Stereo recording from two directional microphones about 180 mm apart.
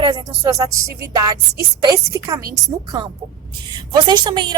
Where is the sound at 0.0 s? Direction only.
25° right (ahead or behind).